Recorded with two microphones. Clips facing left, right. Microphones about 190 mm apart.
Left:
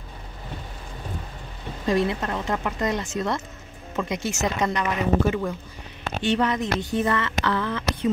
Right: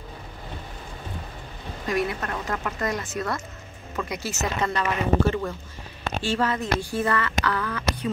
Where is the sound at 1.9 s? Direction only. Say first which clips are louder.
Left 3 dB; 25° left (ahead or behind).